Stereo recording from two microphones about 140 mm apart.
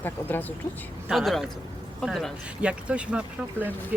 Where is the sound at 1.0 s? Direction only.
Centre (ahead or behind).